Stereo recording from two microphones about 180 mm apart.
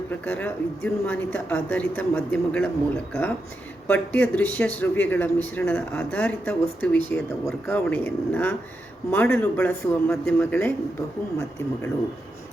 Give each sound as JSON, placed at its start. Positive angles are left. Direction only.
{"t": 0.1, "sound": "speech", "side_deg": 10}
{"t": 3.8, "sound": "speech", "side_deg": 10}